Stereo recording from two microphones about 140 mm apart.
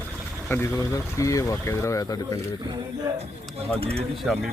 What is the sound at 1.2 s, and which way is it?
Speech, 25° left (ahead or behind).